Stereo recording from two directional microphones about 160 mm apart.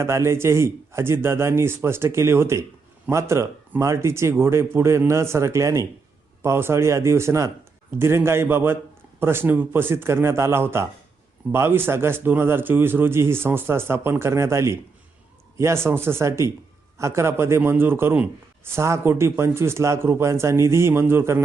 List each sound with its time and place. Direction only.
0.0 s a man's voice: 15° right (ahead or behind)